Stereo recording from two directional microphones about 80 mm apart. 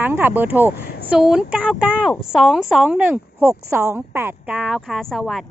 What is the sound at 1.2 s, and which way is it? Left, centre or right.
Speech, centre.